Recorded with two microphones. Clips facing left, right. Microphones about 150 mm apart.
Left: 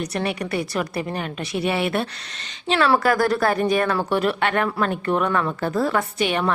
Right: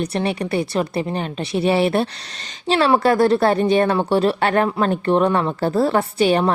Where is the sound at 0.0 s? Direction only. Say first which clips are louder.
Right 3 dB; 30° right (ahead or behind).